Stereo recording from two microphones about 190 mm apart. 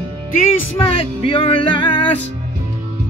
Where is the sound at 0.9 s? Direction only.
30° left (ahead or behind).